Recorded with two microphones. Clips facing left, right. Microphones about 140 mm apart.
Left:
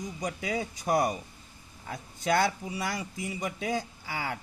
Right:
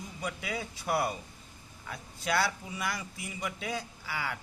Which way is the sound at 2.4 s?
30° left (ahead or behind).